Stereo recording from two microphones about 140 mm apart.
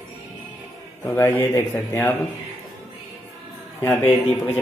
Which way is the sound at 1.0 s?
20° left (ahead or behind).